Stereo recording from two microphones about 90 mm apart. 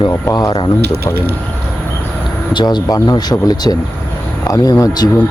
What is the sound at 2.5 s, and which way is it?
Speech, 55° left (ahead or behind).